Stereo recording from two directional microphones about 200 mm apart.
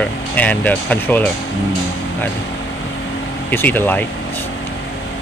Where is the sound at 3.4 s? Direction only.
10° left (ahead or behind).